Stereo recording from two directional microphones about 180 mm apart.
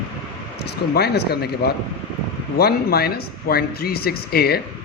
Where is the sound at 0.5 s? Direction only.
65° left (ahead or behind).